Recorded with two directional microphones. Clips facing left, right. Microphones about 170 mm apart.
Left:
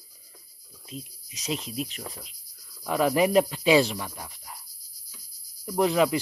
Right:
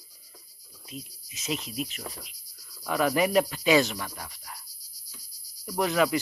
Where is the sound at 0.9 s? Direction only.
35° left (ahead or behind).